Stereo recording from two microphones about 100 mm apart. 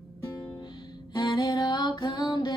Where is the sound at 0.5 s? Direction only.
45° left (ahead or behind).